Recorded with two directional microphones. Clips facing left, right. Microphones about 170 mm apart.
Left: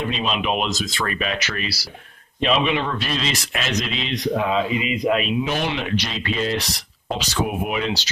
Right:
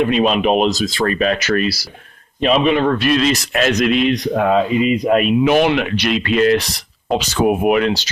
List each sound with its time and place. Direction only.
0.0 s a man's voice: 55° right (ahead or behind)